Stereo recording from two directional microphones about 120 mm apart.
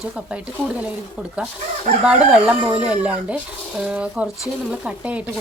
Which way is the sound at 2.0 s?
10° right (ahead or behind).